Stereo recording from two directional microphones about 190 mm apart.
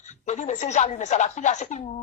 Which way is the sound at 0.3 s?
40° left (ahead or behind).